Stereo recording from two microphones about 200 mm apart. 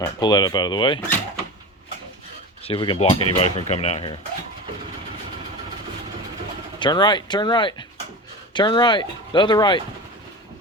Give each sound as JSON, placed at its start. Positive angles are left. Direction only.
{"t": 0.0, "sound": "speech", "side_deg": 20}
{"t": 2.6, "sound": "speech", "side_deg": 25}
{"t": 6.7, "sound": "speech", "side_deg": 20}